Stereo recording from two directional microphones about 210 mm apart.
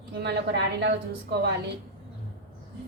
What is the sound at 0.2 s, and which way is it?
A woman's voice, 55° right (ahead or behind).